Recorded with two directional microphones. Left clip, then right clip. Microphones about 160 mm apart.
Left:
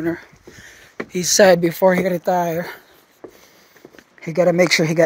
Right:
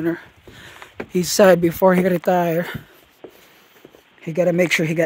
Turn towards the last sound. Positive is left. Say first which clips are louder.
# left 3 dB
turn(degrees=-10)  # may be behind; listen again after turning